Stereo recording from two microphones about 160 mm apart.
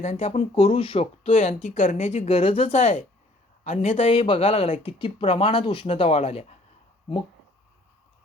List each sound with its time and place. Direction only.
0.0 s speech: 45° left (ahead or behind)